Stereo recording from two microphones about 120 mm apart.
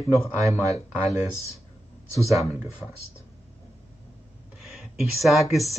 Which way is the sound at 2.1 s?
25° right (ahead or behind).